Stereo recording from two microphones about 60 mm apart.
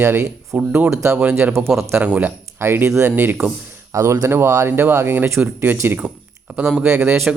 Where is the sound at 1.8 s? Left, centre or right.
Right.